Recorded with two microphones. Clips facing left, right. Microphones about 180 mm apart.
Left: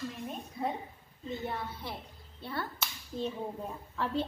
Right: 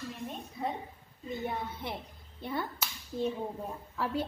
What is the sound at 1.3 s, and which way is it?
Speech, 15° right (ahead or behind).